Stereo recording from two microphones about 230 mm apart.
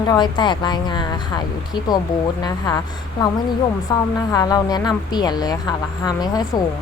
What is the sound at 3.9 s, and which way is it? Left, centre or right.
Speech, centre.